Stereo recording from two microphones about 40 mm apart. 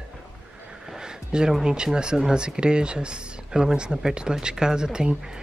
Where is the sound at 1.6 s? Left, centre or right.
Right.